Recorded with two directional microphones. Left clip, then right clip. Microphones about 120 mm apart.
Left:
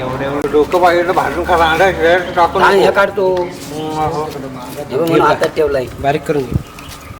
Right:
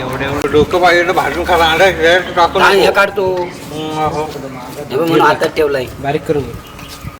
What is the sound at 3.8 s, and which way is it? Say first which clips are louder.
Speech: right 1 dB; 35° right (ahead or behind).